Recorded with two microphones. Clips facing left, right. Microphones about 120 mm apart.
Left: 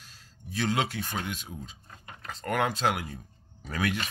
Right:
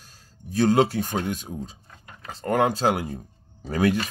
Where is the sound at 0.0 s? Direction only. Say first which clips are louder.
Right 3 dB; 40° right (ahead or behind).